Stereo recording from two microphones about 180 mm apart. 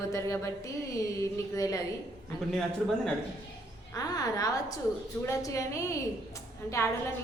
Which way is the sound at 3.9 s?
20° left (ahead or behind).